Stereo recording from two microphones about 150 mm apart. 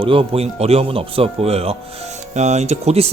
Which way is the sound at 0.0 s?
40° right (ahead or behind).